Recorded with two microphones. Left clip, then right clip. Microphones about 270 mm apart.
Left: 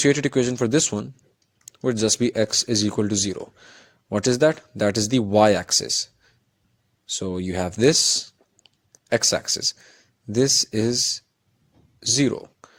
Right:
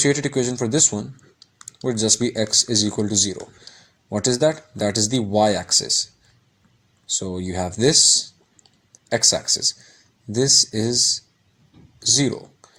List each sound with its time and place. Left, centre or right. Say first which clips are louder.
0.0 s speech: left 1 dB; left
7.2 s speech: left 1 dB; left
11.9 s a sound: right 2 dB; left